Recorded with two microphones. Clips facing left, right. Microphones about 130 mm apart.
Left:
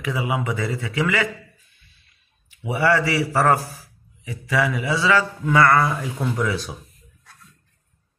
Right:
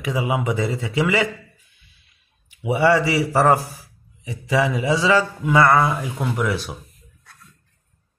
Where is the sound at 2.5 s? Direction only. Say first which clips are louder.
Right 3 dB; 20° right (ahead or behind).